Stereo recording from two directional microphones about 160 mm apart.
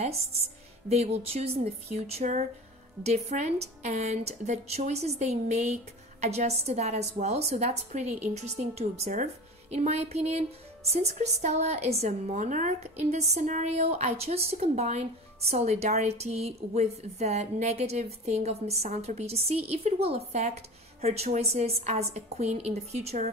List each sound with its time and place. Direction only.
0.8 s a woman's voice: 40° right (ahead or behind)